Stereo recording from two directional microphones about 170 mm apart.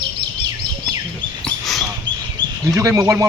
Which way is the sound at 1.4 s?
Centre (ahead or behind).